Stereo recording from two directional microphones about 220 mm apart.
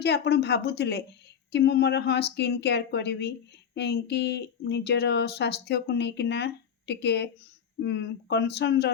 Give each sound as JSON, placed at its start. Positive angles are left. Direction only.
{"t": 0.0, "sound": "a woman's voice", "side_deg": 50}